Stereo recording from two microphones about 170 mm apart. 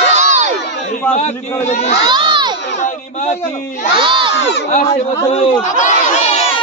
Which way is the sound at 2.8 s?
40° left (ahead or behind).